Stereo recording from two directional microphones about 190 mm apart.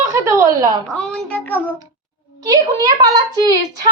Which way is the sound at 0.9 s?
5° left (ahead or behind).